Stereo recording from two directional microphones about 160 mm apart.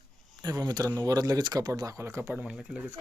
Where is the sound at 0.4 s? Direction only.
25° right (ahead or behind); by 3.0 s centre (ahead or behind).